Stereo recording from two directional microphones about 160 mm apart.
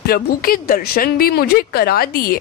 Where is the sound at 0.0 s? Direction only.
70° left (ahead or behind).